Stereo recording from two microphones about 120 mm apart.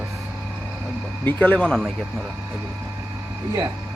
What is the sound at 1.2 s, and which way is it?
Speech, 15° left (ahead or behind).